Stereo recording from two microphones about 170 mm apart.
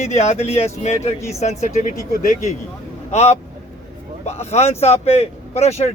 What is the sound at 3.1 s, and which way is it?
A man's voice, 40° left (ahead or behind).